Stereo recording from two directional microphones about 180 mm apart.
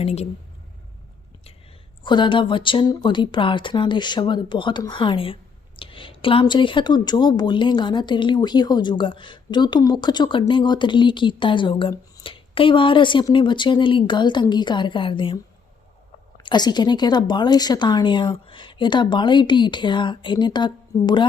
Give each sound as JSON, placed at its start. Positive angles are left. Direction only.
{"t": 0.0, "sound": "speech", "side_deg": 35}
{"t": 2.0, "sound": "speech", "side_deg": 25}
{"t": 16.4, "sound": "speech", "side_deg": 25}